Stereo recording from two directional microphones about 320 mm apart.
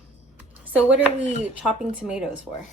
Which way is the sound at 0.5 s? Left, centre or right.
Centre.